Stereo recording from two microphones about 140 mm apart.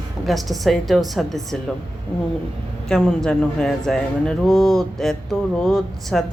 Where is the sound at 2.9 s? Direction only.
Centre (ahead or behind).